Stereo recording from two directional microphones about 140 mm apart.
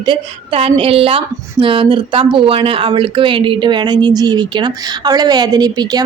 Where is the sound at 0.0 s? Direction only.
40° right (ahead or behind).